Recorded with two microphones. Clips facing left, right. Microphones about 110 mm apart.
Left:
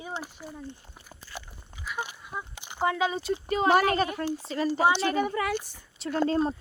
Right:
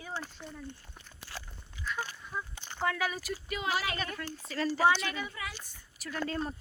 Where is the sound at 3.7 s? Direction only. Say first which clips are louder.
Left 13 dB; 45° left (ahead or behind).